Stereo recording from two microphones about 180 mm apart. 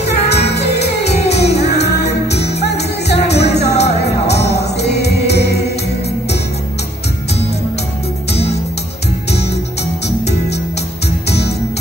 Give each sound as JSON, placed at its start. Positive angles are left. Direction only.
{"t": 0.3, "sound": "music", "side_deg": 70}
{"t": 11.2, "sound": "music", "side_deg": 65}